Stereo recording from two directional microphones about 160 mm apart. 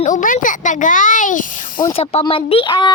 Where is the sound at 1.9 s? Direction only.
35° left (ahead or behind).